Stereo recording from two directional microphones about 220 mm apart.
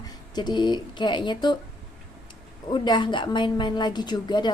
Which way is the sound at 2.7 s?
20° left (ahead or behind).